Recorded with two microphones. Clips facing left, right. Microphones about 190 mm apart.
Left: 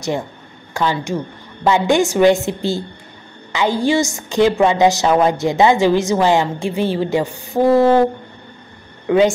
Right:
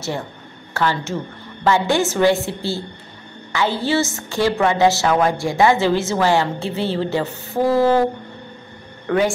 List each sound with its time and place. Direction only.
0.7 s a woman's voice: 15° left (ahead or behind)
9.0 s speech: 20° left (ahead or behind)